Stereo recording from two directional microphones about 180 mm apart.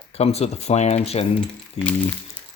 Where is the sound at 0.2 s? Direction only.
35° left (ahead or behind).